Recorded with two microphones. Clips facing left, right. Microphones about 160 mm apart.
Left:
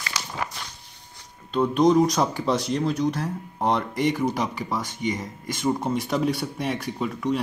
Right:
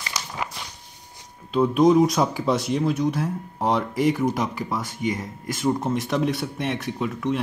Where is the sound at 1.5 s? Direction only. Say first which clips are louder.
Right 2 dB; 5° right (ahead or behind).